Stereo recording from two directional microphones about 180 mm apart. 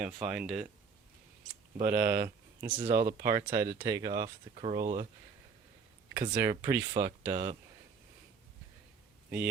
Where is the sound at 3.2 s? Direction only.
15° right (ahead or behind).